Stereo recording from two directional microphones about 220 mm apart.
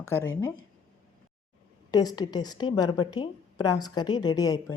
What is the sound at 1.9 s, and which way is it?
Speech, 15° left (ahead or behind).